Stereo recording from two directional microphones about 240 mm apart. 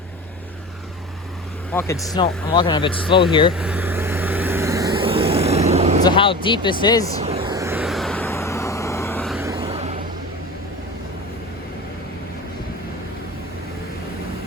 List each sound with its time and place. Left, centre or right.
1.7 s speech: centre
3.5 s vehicle: centre; by 6.0 s right
6.0 s speech: centre
7.2 s vehicle: right
7.4 s vehicle: centre
9.4 s vehicle: centre
9.6 s vehicle: right